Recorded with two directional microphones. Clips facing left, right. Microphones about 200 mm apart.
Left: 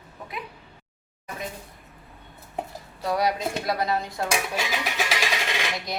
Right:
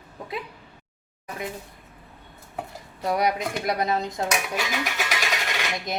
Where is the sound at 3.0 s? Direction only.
20° right (ahead or behind).